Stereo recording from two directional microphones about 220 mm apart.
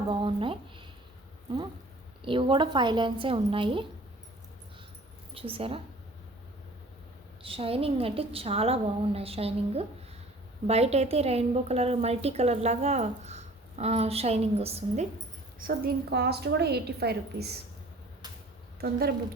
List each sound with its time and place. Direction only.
0.1 s speech: 20° right (ahead or behind)
2.2 s a woman's voice: 20° right (ahead or behind)
5.3 s a woman's voice: 25° right (ahead or behind)
7.4 s a woman's voice: 25° right (ahead or behind)
15.5 s a woman's voice: 40° right (ahead or behind)
18.8 s a woman's voice: 45° right (ahead or behind)